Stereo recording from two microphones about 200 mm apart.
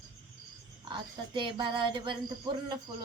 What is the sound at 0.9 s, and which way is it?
Speech, 25° right (ahead or behind).